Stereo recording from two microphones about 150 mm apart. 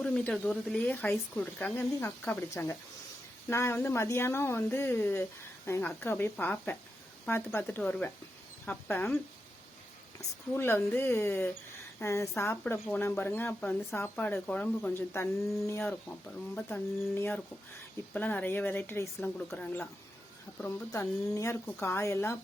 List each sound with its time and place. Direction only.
0.0 s speech: 10° left (ahead or behind)